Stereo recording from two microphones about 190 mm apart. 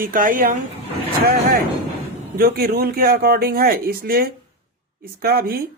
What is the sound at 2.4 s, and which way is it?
Speech, 50° right (ahead or behind).